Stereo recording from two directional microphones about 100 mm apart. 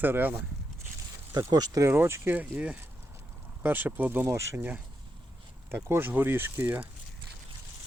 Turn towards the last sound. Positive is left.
turn(degrees=-20)  # may be behind; listen again after turning